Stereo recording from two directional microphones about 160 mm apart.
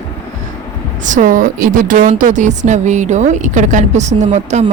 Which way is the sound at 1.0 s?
50° right (ahead or behind).